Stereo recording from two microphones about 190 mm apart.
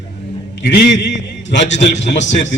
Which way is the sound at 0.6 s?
60° left (ahead or behind).